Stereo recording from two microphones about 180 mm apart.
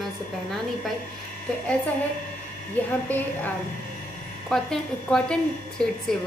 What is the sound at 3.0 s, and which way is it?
A woman's voice, 10° left (ahead or behind).